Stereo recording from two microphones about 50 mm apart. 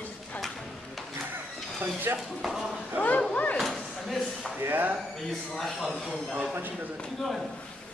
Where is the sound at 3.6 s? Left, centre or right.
Centre.